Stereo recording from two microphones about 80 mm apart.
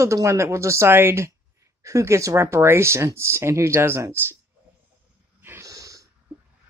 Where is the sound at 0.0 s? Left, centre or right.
Right.